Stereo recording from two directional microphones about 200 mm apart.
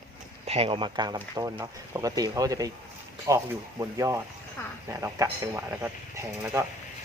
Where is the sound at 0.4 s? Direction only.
30° right (ahead or behind).